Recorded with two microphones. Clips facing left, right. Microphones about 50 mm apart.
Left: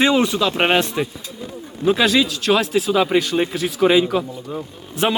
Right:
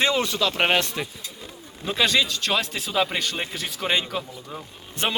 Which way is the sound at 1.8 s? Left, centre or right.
Centre.